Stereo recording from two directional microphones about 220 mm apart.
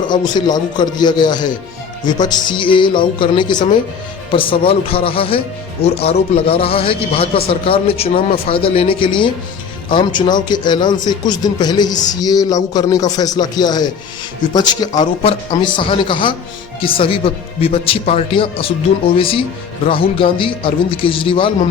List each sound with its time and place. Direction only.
0.1 s a man's voice: 20° left (ahead or behind)